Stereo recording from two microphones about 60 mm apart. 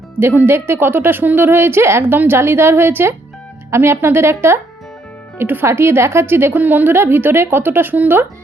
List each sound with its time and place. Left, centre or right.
0.2 s a woman's voice: right